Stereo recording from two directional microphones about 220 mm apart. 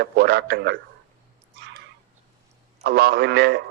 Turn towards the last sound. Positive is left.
turn(degrees=-50)  # may be behind; listen again after turning